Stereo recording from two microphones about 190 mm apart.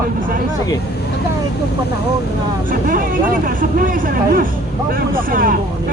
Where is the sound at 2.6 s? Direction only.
45° right (ahead or behind).